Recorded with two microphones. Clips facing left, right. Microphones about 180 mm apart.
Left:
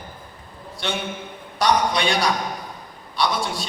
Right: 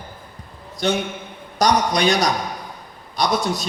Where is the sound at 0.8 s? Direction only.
40° right (ahead or behind).